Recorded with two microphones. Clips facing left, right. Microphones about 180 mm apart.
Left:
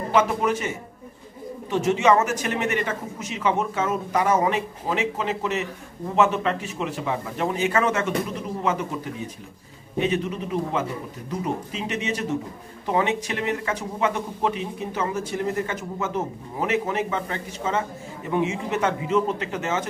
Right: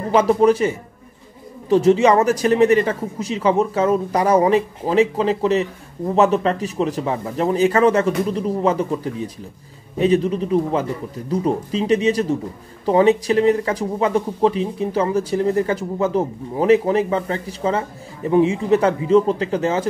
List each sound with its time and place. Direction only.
0.1 s speech: 35° right (ahead or behind)